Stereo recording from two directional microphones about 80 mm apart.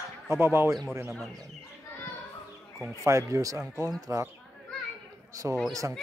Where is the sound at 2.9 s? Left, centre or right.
Right.